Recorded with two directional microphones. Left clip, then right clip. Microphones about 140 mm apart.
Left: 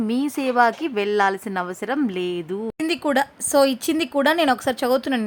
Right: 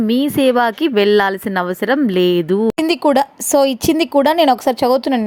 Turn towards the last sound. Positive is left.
turn(degrees=-35)  # may be behind; listen again after turning